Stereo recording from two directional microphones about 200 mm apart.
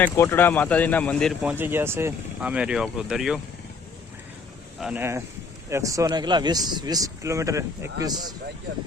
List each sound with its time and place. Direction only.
0.0 s speech: 10° left (ahead or behind)
4.8 s speech: 5° right (ahead or behind)